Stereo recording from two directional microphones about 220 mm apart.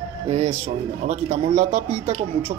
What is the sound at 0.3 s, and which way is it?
Speech, 30° right (ahead or behind).